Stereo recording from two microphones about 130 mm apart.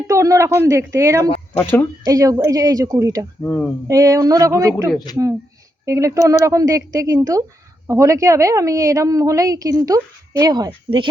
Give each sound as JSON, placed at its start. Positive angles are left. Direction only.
{"t": 0.1, "sound": "a woman's voice", "side_deg": -25}
{"t": 3.4, "sound": "speech", "side_deg": 15}
{"t": 3.8, "sound": "a woman's voice", "side_deg": -25}
{"t": 10.7, "sound": "speech", "side_deg": -40}